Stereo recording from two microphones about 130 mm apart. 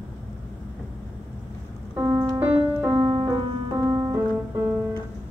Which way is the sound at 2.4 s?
15° right (ahead or behind).